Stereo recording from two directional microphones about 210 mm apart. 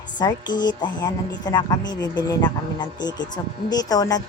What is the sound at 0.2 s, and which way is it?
Speech, 20° left (ahead or behind).